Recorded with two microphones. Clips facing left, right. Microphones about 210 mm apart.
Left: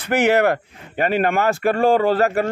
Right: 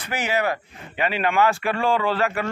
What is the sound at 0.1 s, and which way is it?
Speech, 65° left (ahead or behind).